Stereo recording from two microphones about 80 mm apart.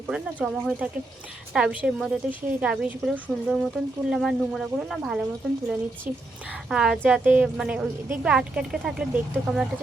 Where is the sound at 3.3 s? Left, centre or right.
Centre.